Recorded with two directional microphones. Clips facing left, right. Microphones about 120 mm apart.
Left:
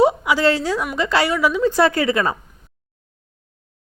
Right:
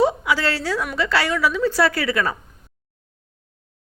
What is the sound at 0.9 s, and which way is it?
A woman's voice, 20° left (ahead or behind).